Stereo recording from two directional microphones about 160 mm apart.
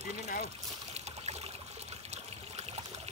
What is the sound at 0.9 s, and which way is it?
Trickle, 45° right (ahead or behind).